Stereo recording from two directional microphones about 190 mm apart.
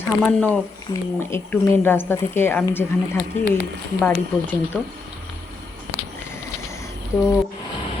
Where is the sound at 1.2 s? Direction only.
10° left (ahead or behind).